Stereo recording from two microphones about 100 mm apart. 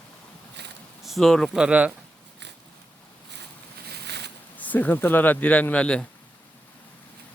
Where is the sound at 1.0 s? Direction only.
Centre (ahead or behind).